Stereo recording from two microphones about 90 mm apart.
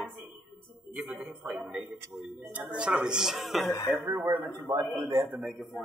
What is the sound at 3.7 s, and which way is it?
Speech, 40° left (ahead or behind).